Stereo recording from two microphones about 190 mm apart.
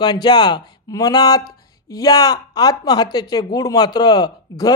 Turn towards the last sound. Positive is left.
turn(degrees=20)  # may be behind; listen again after turning